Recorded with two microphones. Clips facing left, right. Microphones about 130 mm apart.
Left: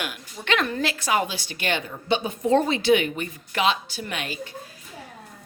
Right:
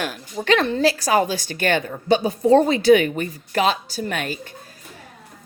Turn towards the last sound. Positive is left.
turn(degrees=-45)  # may be behind; listen again after turning